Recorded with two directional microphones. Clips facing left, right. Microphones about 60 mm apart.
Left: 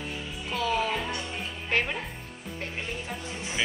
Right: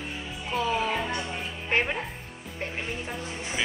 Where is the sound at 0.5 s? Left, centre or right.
Right.